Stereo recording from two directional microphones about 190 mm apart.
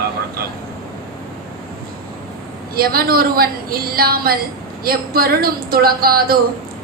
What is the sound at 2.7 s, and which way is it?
A woman's voice, 50° right (ahead or behind).